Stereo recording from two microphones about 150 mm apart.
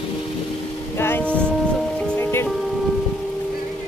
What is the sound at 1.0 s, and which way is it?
Music, 10° left (ahead or behind).